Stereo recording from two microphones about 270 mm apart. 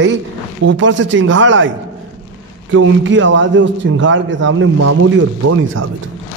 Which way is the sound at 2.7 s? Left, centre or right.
Right.